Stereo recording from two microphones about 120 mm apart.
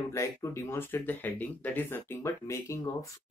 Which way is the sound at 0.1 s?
25° left (ahead or behind).